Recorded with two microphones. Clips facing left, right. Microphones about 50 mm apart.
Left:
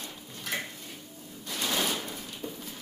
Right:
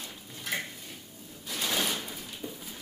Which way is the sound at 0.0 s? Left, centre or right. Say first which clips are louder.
Left 1 dB; centre.